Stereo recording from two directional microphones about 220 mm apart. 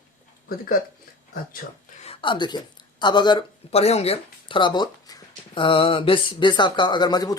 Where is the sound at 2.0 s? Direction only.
25° left (ahead or behind).